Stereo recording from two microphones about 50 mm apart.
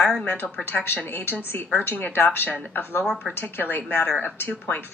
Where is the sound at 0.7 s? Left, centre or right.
Left.